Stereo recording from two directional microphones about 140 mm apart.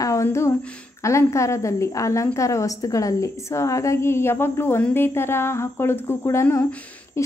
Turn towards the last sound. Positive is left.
turn(degrees=20)  # may be behind; listen again after turning